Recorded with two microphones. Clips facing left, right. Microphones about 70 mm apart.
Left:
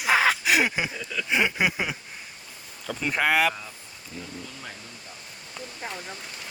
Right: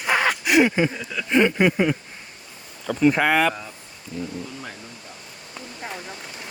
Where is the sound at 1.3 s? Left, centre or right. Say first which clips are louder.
Right 7 dB; centre.